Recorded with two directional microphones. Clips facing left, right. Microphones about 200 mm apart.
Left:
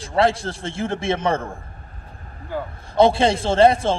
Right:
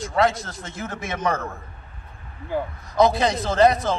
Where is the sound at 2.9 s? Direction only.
30° left (ahead or behind).